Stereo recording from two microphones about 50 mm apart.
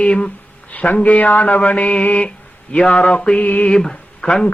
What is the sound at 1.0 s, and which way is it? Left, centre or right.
Speech, left.